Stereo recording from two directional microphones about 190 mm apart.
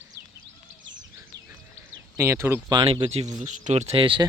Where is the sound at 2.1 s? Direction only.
15° right (ahead or behind).